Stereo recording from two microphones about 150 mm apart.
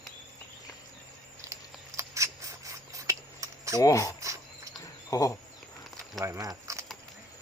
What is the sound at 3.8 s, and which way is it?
Speech, 20° left (ahead or behind).